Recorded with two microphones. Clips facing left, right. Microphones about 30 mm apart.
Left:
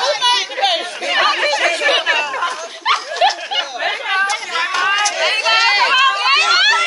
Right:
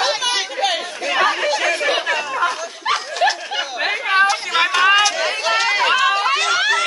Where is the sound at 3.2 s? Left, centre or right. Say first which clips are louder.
Left 2 dB; left.